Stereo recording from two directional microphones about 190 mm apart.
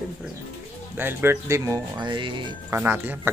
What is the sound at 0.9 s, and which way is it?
Speech, 10° right (ahead or behind).